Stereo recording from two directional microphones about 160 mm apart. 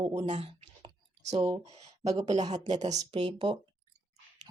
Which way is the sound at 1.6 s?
40° right (ahead or behind).